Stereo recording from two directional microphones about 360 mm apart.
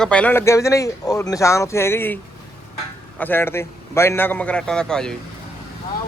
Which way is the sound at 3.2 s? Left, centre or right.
Centre.